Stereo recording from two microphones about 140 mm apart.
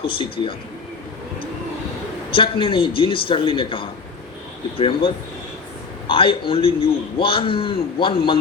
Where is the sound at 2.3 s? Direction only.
40° left (ahead or behind).